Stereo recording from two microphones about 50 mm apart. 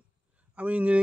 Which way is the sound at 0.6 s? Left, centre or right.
Right.